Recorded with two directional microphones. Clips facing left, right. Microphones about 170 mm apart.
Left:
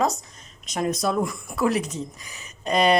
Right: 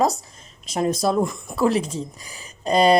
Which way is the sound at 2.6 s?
35° right (ahead or behind).